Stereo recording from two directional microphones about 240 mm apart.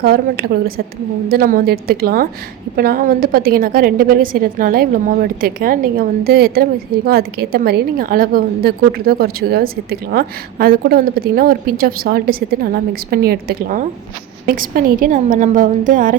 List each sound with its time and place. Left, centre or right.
0.0 s a woman's voice: right